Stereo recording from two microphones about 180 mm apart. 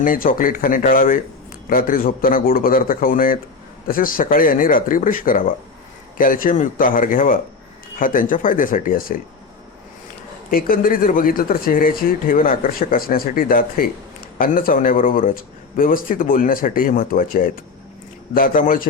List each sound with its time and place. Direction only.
0.0 s speech: 50° left (ahead or behind)
10.5 s speech: 55° left (ahead or behind)